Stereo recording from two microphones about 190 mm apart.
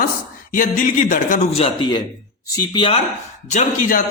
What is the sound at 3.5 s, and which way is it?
Speech, 40° left (ahead or behind).